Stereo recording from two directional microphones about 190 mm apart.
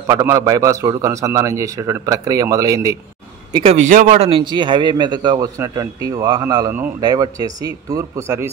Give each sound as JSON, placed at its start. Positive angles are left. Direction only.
{"t": 0.0, "sound": "a man's voice", "side_deg": -15}
{"t": 3.7, "sound": "a man's voice", "side_deg": -40}